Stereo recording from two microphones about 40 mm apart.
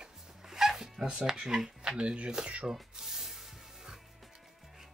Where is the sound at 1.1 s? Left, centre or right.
Centre.